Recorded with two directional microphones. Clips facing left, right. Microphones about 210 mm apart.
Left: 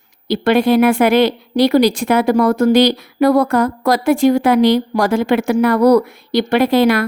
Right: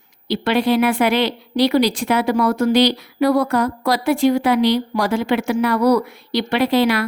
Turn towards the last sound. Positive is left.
turn(degrees=50)  # may be behind; listen again after turning